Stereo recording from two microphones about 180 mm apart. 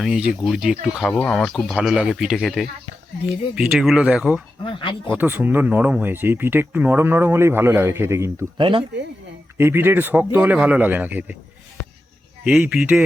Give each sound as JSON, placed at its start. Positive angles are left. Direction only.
{"t": 0.0, "sound": "speech", "side_deg": -5}
{"t": 4.6, "sound": "speech", "side_deg": 30}
{"t": 5.1, "sound": "speech", "side_deg": -10}
{"t": 8.5, "sound": "speech", "side_deg": -30}
{"t": 9.6, "sound": "speech", "side_deg": -15}
{"t": 12.5, "sound": "speech", "side_deg": -5}